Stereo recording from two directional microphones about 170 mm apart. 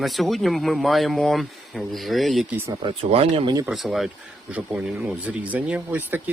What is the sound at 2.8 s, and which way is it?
Speech, 35° right (ahead or behind).